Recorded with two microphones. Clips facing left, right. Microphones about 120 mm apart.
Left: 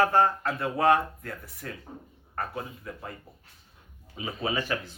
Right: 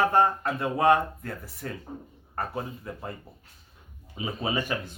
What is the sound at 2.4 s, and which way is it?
Speech, 30° right (ahead or behind).